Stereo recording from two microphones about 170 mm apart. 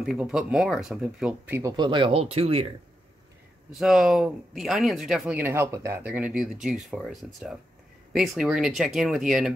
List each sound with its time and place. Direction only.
0.0 s speech: 5° right (ahead or behind)
1.7 s speech: 25° right (ahead or behind)
3.7 s speech: centre (ahead or behind)